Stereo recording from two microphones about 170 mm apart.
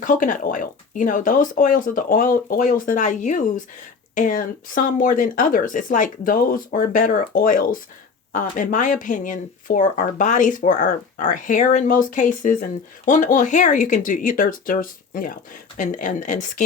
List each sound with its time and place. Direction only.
0.0 s speech: 50° left (ahead or behind)